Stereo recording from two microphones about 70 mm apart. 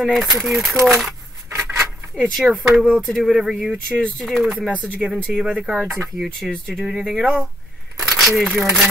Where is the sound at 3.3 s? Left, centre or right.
Centre.